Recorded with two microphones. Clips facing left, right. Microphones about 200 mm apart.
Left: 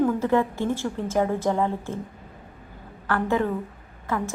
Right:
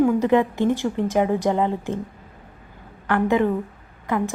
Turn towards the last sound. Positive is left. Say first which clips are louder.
# right 4 dB
turn(degrees=-15)  # may be behind; listen again after turning